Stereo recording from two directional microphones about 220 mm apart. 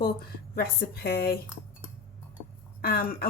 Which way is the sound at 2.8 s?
45° left (ahead or behind).